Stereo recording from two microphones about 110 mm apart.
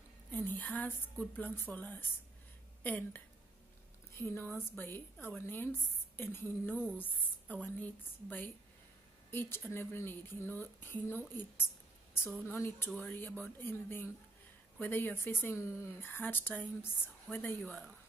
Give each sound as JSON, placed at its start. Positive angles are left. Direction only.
{"t": 0.3, "sound": "a woman's voice", "side_deg": 20}